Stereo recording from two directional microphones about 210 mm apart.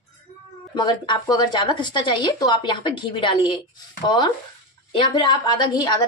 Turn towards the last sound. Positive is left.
turn(degrees=20)  # may be behind; listen again after turning